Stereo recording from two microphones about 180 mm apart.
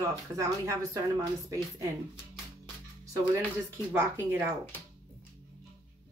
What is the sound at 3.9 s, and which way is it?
Speech, 10° right (ahead or behind).